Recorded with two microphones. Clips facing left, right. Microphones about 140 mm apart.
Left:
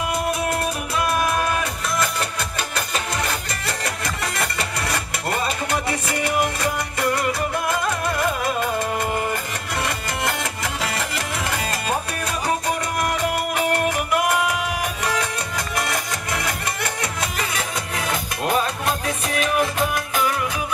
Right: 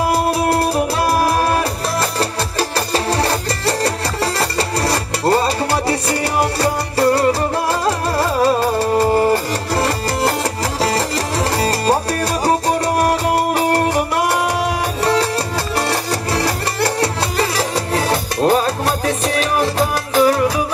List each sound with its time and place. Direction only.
0.0 s music: 35° right (ahead or behind)